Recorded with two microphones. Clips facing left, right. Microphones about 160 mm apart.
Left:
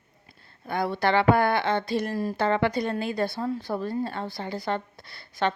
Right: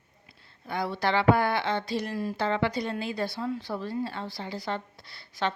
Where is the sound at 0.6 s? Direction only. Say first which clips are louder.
Left 3 dB; 50° left (ahead or behind).